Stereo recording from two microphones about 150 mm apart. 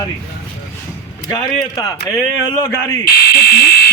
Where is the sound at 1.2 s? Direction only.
25° left (ahead or behind).